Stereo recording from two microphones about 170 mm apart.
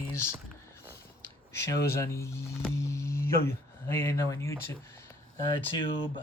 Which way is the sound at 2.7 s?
15° left (ahead or behind).